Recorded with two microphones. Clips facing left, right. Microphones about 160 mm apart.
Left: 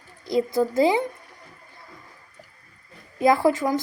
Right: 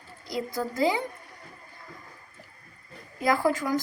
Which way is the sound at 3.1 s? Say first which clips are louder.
Left 6 dB; 25° left (ahead or behind).